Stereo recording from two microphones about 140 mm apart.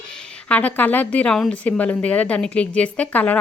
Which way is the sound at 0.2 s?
10° left (ahead or behind).